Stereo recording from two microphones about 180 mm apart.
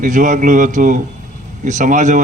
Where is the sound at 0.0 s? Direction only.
45° right (ahead or behind).